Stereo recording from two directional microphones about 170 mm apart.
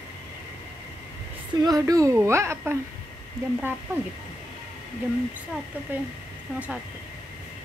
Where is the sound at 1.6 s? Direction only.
20° right (ahead or behind).